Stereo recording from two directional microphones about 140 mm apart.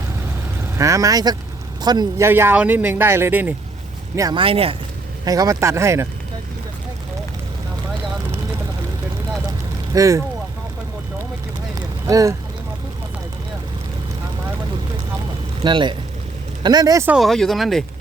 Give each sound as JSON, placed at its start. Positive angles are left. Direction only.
{"t": 0.8, "sound": "speech", "side_deg": -25}
{"t": 2.2, "sound": "speech", "side_deg": -15}
{"t": 4.4, "sound": "speech", "side_deg": -40}
{"t": 5.2, "sound": "speech", "side_deg": -25}
{"t": 9.9, "sound": "speech", "side_deg": -25}
{"t": 11.7, "sound": "vehicle", "side_deg": -25}
{"t": 15.6, "sound": "speech", "side_deg": -35}
{"t": 17.1, "sound": "speech", "side_deg": 0}